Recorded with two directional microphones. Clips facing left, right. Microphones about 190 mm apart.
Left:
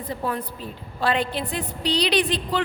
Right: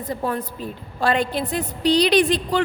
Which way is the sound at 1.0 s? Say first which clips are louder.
Right 3 dB; 45° right (ahead or behind).